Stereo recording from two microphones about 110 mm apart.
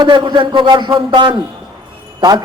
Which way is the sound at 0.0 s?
45° right (ahead or behind).